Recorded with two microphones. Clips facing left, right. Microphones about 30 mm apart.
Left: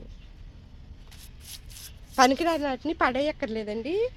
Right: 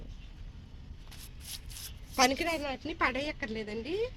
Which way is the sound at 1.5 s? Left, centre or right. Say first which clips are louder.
Even; centre.